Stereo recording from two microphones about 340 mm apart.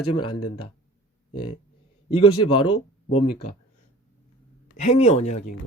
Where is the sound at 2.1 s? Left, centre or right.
Centre.